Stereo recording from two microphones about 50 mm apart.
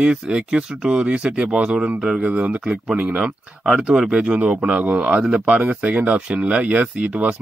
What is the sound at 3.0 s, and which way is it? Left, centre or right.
Speech, right.